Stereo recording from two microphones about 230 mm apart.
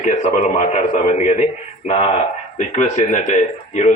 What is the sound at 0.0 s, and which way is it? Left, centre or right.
A man's voice, left.